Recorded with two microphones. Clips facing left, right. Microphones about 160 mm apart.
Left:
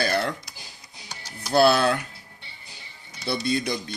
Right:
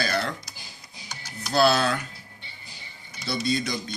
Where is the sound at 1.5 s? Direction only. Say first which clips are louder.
Left 3 dB; 55° left (ahead or behind).